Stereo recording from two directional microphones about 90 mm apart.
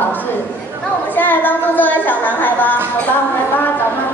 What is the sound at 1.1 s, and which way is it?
A woman's voice, 20° left (ahead or behind).